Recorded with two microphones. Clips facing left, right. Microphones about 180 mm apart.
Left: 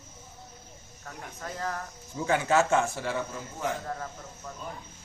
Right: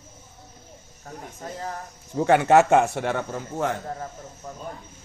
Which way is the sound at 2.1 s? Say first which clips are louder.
Right 8 dB; 65° right (ahead or behind).